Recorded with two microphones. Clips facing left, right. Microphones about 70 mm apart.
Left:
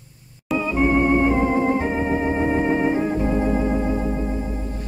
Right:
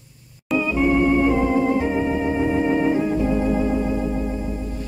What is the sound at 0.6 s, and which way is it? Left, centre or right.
Organ, left.